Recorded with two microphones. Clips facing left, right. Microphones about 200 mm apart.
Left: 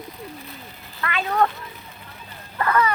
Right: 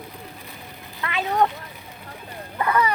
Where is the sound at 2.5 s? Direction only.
15° right (ahead or behind).